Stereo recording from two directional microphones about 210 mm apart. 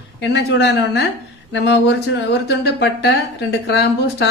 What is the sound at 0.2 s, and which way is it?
Speech, 55° left (ahead or behind).